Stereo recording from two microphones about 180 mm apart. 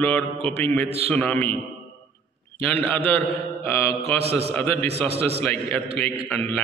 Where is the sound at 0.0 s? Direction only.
10° left (ahead or behind).